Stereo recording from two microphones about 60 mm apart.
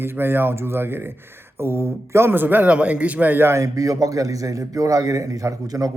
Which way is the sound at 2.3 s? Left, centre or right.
Right.